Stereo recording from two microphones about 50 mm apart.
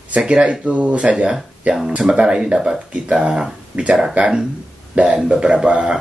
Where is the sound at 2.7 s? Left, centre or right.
Right.